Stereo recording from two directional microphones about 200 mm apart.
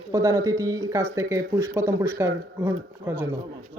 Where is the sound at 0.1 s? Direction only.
15° right (ahead or behind).